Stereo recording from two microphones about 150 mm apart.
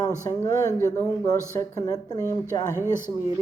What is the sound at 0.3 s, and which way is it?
A woman's voice, 20° left (ahead or behind).